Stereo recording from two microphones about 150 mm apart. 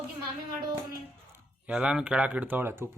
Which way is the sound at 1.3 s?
10° right (ahead or behind).